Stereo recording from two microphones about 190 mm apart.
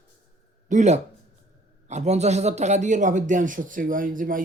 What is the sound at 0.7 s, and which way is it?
A man's voice, 40° right (ahead or behind).